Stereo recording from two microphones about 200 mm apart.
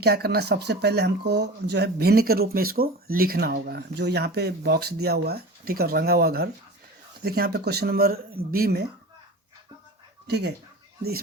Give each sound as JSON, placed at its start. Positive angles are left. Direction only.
{"t": 0.0, "sound": "speech", "side_deg": -50}
{"t": 10.2, "sound": "speech", "side_deg": -55}